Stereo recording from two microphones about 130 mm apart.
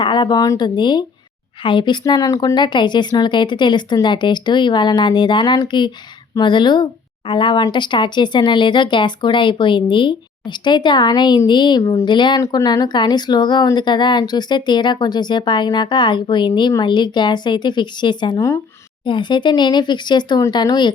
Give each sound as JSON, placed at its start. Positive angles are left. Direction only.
{"t": 0.0, "sound": "speech", "side_deg": 35}
{"t": 11.8, "sound": "speech", "side_deg": 25}
{"t": 12.0, "sound": "speech", "side_deg": 35}